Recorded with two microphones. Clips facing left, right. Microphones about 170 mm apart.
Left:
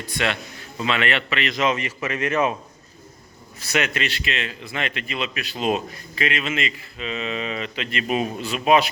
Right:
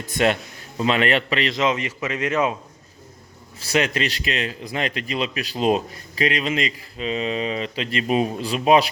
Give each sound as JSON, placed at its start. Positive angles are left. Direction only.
{"t": 0.0, "sound": "a man's voice", "side_deg": -45}
{"t": 1.5, "sound": "a man's voice", "side_deg": -20}
{"t": 3.6, "sound": "speech", "side_deg": -30}